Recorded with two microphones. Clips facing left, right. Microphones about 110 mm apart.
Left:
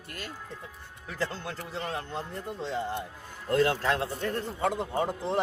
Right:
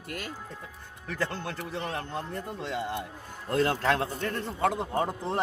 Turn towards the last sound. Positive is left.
turn(degrees=-45)  # may be behind; listen again after turning